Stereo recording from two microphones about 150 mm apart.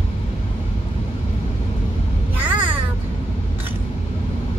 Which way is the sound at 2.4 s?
35° right (ahead or behind).